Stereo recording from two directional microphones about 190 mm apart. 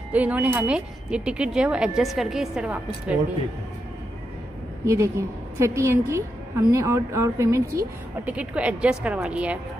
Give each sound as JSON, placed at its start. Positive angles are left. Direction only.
{"t": 0.1, "sound": "speech", "side_deg": -5}
{"t": 4.8, "sound": "speech", "side_deg": -15}